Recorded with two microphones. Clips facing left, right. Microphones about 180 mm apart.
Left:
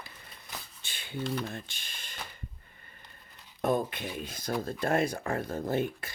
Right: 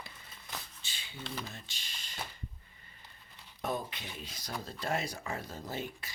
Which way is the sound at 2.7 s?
55° left (ahead or behind).